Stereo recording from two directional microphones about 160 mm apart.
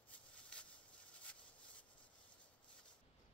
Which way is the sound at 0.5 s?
5° left (ahead or behind).